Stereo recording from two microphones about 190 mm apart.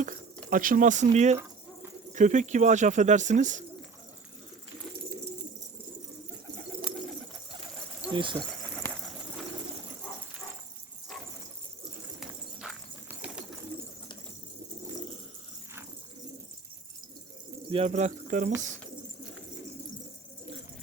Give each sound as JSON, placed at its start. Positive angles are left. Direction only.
{"t": 0.5, "sound": "speech", "side_deg": -45}
{"t": 8.1, "sound": "speech", "side_deg": -25}
{"t": 8.4, "sound": "bird", "side_deg": 5}
{"t": 12.2, "sound": "bird", "side_deg": -5}
{"t": 17.7, "sound": "speech", "side_deg": -30}